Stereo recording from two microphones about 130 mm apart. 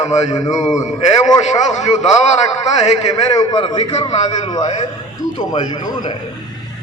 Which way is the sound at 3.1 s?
30° left (ahead or behind).